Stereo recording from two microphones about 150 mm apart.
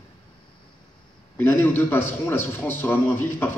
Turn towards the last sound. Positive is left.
turn(degrees=15)  # may be behind; listen again after turning